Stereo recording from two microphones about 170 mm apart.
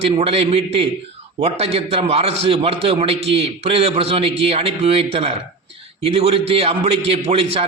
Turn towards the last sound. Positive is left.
turn(degrees=-35)  # may be behind; listen again after turning